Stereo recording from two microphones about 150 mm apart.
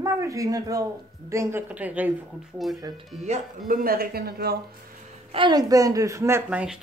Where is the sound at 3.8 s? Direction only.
80° right.